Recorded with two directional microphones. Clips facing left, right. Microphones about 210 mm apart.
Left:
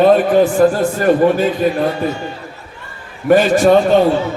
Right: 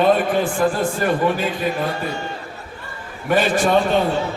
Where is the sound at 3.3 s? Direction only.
45° left (ahead or behind).